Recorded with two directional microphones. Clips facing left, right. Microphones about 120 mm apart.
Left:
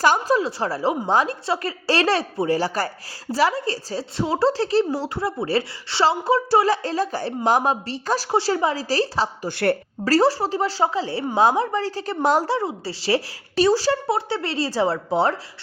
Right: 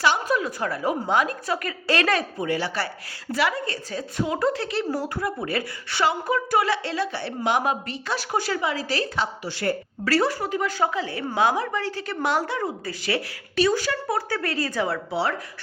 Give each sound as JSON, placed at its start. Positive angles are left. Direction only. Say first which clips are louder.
{"t": 0.0, "sound": "a woman's voice", "louder": "left 4 dB", "side_deg": 45}
{"t": 0.3, "sound": "speech", "louder": "left 3 dB", "side_deg": 30}
{"t": 9.5, "sound": "speech", "louder": "left 7 dB", "side_deg": 60}
{"t": 10.0, "sound": "speech", "louder": "left 4 dB", "side_deg": 35}
{"t": 12.5, "sound": "speech", "louder": "left 3 dB", "side_deg": 30}